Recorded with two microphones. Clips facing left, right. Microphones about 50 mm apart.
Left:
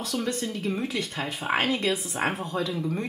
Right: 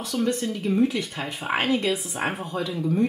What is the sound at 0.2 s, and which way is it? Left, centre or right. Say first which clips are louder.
Speech: right 8 dB; centre.